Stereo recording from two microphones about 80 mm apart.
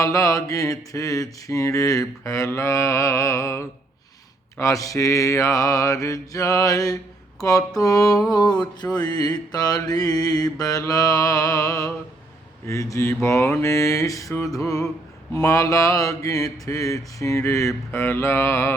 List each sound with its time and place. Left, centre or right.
0.0 s mantra: left
8.3 s a sound: left
9.0 s mantra: left